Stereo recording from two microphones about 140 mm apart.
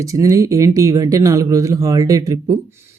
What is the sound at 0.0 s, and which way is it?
Speech, 25° right (ahead or behind).